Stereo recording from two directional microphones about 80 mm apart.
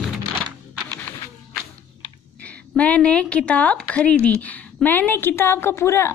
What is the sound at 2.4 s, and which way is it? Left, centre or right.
A woman's voice, centre.